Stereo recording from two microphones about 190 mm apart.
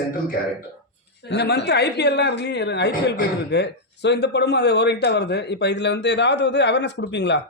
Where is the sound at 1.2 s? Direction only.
60° left (ahead or behind).